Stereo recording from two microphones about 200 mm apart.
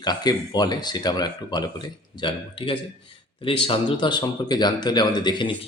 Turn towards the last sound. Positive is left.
turn(degrees=25)  # may be behind; listen again after turning